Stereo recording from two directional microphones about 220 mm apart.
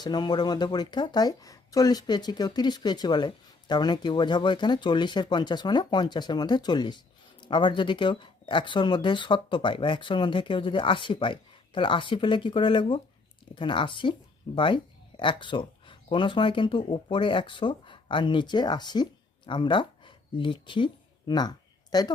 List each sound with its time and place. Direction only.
0.0 s speech: 20° left (ahead or behind)